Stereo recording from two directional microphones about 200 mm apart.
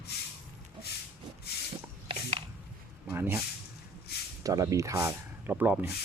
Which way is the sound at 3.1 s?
10° right (ahead or behind).